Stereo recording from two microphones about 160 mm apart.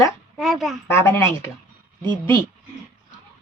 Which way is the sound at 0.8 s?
15° left (ahead or behind).